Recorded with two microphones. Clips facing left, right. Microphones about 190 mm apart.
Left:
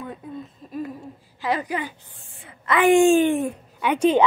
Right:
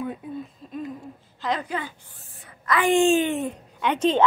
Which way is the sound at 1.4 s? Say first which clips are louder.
Left 2 dB; 10° left (ahead or behind).